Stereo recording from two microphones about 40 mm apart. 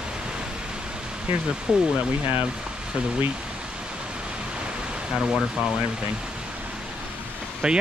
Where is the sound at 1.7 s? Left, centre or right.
Right.